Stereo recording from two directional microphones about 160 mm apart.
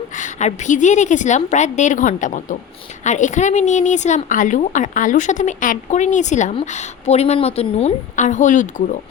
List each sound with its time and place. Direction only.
0.2 s a woman's voice: 50° left (ahead or behind)